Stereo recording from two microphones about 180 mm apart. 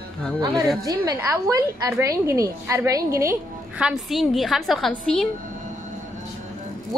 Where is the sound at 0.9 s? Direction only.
15° right (ahead or behind); by 5.2 s centre (ahead or behind).